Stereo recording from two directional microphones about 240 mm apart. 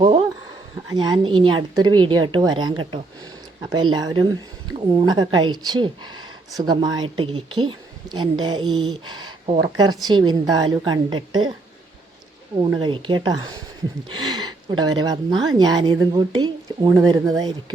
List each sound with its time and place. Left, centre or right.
0.9 s a woman's voice: centre
12.5 s a woman's voice: centre
14.2 s a sound: centre
15.0 s a woman's voice: centre